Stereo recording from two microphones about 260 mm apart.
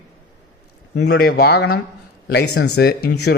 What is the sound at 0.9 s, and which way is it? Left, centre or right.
Speech, left.